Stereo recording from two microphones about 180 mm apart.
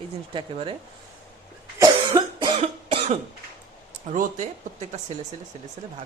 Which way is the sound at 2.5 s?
35° right (ahead or behind).